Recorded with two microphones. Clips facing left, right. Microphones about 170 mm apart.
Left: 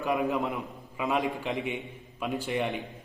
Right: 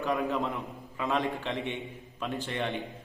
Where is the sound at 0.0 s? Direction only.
15° left (ahead or behind).